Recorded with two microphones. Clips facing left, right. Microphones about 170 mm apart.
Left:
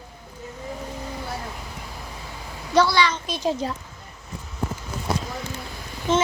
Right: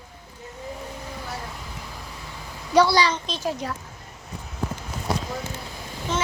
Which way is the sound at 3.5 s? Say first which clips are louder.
Left 4 dB; 25° left (ahead or behind).